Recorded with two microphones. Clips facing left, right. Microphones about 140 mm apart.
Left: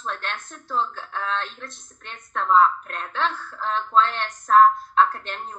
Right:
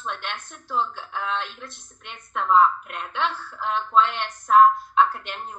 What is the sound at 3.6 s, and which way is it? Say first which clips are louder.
A woman's voice: even; 10° right (ahead or behind).